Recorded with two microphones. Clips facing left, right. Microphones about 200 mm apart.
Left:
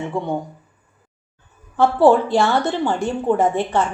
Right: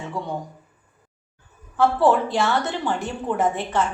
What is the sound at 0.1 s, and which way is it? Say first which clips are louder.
Speech: left 5 dB; 50° left (ahead or behind).